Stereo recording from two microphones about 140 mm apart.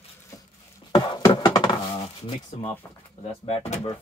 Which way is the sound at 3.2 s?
50° left (ahead or behind).